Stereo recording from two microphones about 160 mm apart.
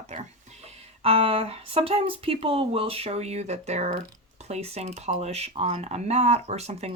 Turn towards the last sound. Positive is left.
turn(degrees=-40)  # may be behind; listen again after turning